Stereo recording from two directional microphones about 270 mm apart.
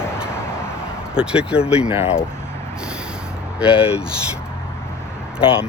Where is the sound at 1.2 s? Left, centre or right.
Centre.